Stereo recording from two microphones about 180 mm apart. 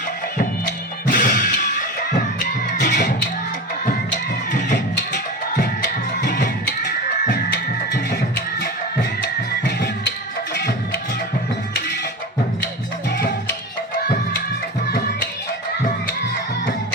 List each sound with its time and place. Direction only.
1.0 s music: 55° left (ahead or behind)
2.6 s music: 70° left (ahead or behind)
4.5 s music: 70° left (ahead or behind)
13.1 s music: 60° left (ahead or behind)
14.8 s music: 65° left (ahead or behind)